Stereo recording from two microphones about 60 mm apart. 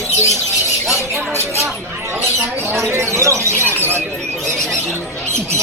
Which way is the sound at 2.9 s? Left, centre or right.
Right.